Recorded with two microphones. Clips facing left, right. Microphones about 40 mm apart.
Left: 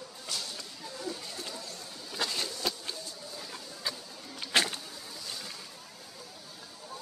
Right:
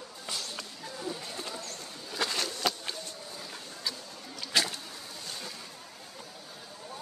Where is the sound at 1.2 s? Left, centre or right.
Right.